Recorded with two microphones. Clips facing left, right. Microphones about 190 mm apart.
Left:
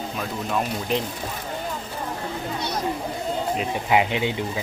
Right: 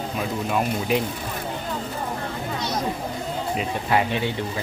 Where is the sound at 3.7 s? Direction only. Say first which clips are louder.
Left 1 dB; 15° left (ahead or behind).